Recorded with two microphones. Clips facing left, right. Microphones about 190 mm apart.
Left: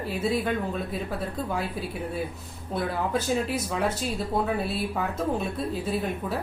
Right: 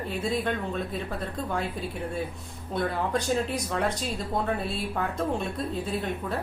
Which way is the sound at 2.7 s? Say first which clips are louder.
Even; 5° left (ahead or behind).